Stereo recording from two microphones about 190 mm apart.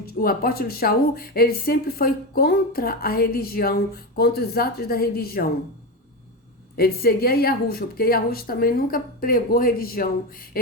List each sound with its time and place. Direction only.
0.0 s speech: 50° left (ahead or behind)
6.7 s speech: 55° left (ahead or behind)